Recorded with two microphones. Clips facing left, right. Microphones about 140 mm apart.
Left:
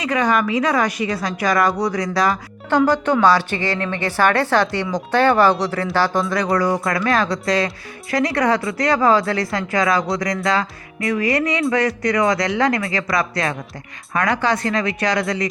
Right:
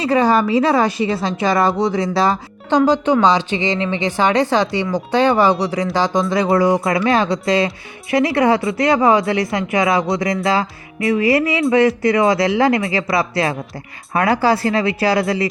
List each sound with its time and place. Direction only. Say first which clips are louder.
0.0 s a woman's voice: right 4 dB; 30° right (ahead or behind)
2.7 s a woman's voice: right 2 dB; 15° right (ahead or behind)
6.3 s a woman's voice: right 4 dB; 25° right (ahead or behind)